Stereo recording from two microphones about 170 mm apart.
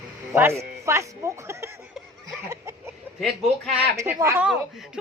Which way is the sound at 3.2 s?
Centre (ahead or behind).